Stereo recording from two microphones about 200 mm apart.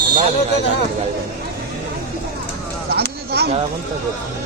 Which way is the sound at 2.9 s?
55° right (ahead or behind).